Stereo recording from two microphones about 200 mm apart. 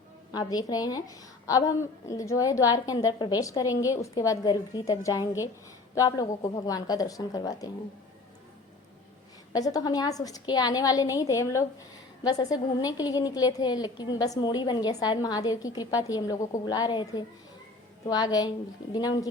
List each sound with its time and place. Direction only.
0.3 s a woman's voice: 20° left (ahead or behind)
9.5 s a woman's voice: 20° left (ahead or behind)